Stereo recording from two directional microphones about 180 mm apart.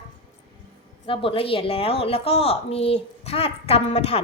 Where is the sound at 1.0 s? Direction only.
30° left (ahead or behind).